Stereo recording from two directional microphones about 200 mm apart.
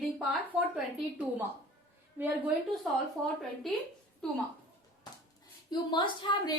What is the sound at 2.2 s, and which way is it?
A woman's voice, 5° right (ahead or behind).